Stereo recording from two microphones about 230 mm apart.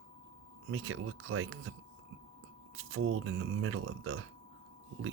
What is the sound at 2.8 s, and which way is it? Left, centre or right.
Speech, right.